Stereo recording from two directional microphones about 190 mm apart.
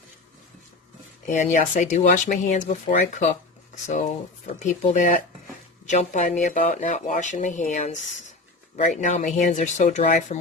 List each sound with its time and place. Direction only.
1.3 s speech: 40° left (ahead or behind)
3.8 s speech: 40° left (ahead or behind)